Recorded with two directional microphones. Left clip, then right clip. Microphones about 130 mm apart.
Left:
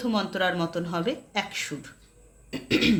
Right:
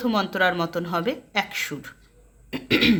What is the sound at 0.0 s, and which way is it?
A woman's voice, 30° right (ahead or behind).